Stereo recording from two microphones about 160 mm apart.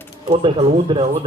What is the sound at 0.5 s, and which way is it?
Speech, 40° right (ahead or behind).